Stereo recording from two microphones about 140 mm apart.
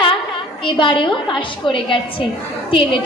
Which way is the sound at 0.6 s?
35° left (ahead or behind).